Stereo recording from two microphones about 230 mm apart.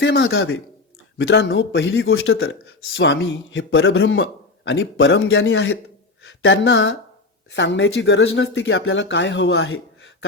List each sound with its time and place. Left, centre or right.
0.0 s speech: left